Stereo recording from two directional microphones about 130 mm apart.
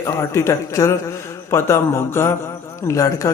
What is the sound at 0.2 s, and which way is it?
Speech, 20° left (ahead or behind).